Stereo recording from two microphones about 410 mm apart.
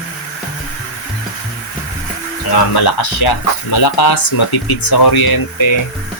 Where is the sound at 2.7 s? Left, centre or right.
Left.